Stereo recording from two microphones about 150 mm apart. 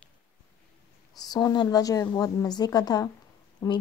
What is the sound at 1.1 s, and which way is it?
A woman's voice, 25° left (ahead or behind).